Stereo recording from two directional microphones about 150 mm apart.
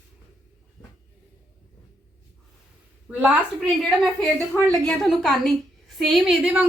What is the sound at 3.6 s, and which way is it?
A woman's voice, centre (ahead or behind).